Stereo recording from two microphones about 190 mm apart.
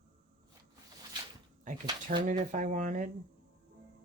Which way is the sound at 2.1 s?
40° right (ahead or behind).